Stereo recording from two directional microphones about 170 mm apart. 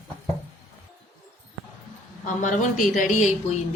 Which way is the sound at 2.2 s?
50° left (ahead or behind).